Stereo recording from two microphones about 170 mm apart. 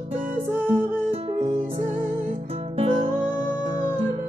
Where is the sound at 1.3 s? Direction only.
35° right (ahead or behind).